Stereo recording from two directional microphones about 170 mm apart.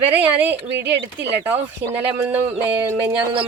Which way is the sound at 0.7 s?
90° right.